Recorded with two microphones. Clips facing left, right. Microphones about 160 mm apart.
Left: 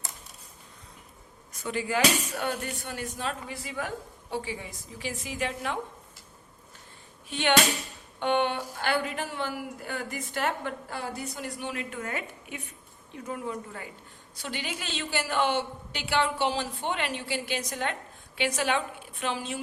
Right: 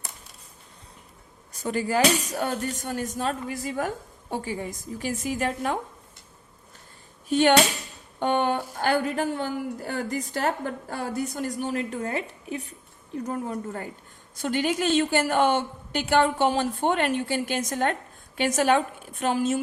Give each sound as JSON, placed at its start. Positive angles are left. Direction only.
{"t": 1.6, "sound": "speech", "side_deg": -40}
{"t": 7.3, "sound": "speech", "side_deg": -45}
{"t": 8.2, "sound": "a sound", "side_deg": -45}
{"t": 8.8, "sound": "a woman's voice", "side_deg": -45}